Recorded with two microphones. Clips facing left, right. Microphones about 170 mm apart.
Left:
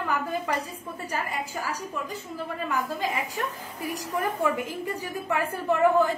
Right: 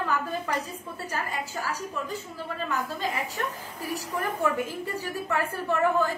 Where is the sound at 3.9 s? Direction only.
15° left (ahead or behind).